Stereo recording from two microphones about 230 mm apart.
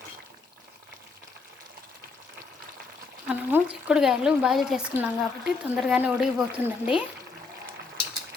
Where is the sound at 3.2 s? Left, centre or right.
Centre.